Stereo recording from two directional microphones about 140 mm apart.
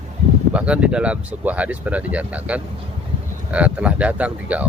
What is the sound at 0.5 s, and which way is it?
Speech, 10° right (ahead or behind).